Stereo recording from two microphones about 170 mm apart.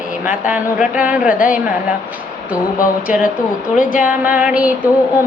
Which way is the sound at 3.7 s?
50° left (ahead or behind).